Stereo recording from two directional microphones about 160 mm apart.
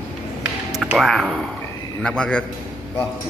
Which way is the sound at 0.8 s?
Centre (ahead or behind).